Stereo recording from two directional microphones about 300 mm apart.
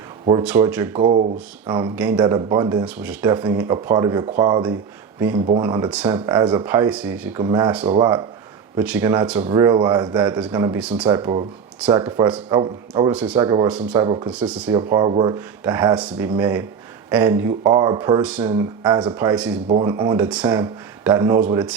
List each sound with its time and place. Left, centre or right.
0.4 s speech: centre
0.9 s speech: right